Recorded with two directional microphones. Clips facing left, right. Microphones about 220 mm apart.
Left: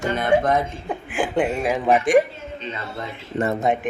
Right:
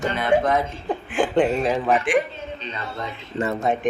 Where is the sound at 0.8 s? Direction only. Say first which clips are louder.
Right 2 dB; 10° left (ahead or behind).